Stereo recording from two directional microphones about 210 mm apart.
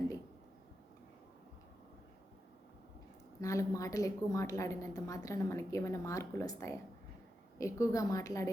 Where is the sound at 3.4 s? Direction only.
15° left (ahead or behind).